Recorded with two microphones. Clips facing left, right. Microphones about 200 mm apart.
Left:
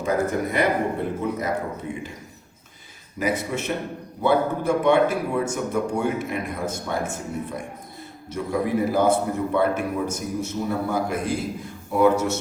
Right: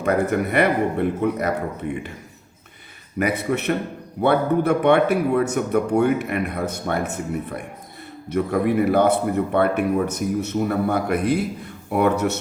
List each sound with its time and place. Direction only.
0.0 s speech: 65° right (ahead or behind)
3.2 s speech: 60° right (ahead or behind)